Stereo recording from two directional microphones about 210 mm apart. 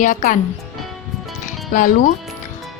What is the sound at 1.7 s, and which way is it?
Speech, 40° left (ahead or behind).